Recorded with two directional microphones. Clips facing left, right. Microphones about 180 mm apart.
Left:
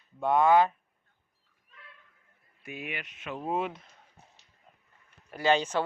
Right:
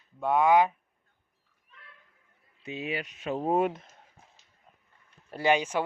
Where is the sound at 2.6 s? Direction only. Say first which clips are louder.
Right 5 dB; 25° right (ahead or behind); by 4.0 s 50° right (ahead or behind).